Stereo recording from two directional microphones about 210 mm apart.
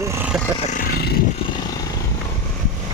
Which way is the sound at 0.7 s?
50° left (ahead or behind).